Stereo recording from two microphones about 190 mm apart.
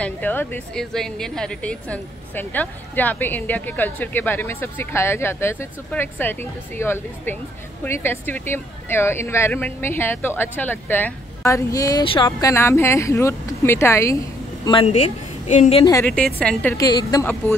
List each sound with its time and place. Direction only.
0.0 s speech: 10° left (ahead or behind); by 15.8 s 40° left (ahead or behind)
15.8 s speech: 15° left (ahead or behind)
16.7 s a woman's voice: 20° left (ahead or behind)